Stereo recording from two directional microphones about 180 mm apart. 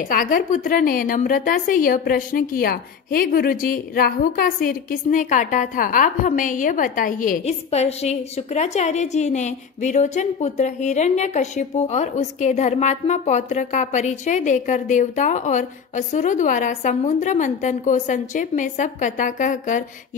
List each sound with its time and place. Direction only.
0.1 s a woman's voice: 50° left (ahead or behind)